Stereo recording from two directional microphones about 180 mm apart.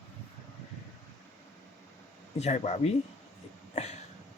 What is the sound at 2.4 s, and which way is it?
Speech, 35° left (ahead or behind).